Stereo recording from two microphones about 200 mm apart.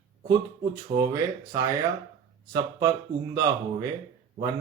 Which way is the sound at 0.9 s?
15° right (ahead or behind).